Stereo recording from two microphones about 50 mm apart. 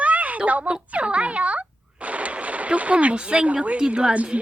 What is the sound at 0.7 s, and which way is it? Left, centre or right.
Speech, right.